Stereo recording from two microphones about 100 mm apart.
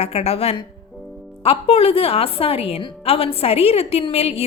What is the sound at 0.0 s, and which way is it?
A woman's voice, 90° left.